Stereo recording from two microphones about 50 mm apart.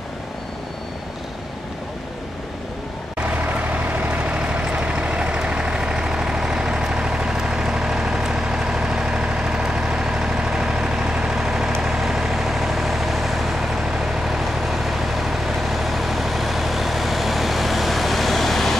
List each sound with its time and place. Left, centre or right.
3.2 s vehicle: right; by 18.8 s centre